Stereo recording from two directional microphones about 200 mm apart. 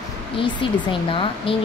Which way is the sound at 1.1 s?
25° left (ahead or behind).